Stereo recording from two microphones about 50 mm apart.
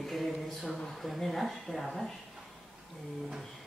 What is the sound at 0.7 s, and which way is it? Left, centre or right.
Speech, centre.